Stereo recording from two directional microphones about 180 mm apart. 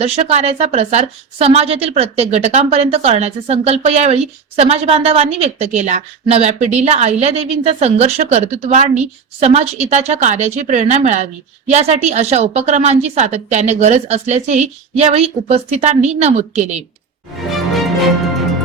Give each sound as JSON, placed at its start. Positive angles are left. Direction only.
{"t": 0.0, "sound": "a woman's voice", "side_deg": -35}